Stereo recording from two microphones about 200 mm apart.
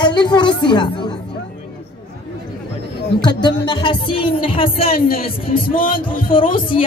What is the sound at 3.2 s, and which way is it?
A woman's voice, 20° left (ahead or behind).